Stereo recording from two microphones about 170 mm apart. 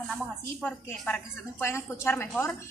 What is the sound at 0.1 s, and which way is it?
A woman's voice, 5° left (ahead or behind).